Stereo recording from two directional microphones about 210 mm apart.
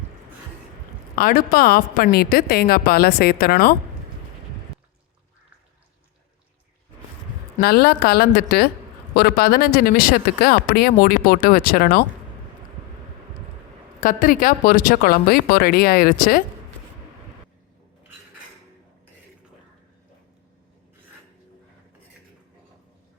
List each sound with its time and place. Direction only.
1.1 s speech: 45° left (ahead or behind)
7.6 s speech: 50° left (ahead or behind)
14.0 s speech: 40° left (ahead or behind)